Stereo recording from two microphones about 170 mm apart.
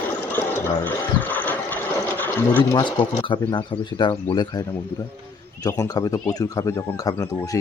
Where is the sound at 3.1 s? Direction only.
30° left (ahead or behind).